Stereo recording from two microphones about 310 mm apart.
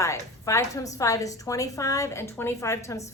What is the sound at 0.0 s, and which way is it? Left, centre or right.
A woman's voice, centre.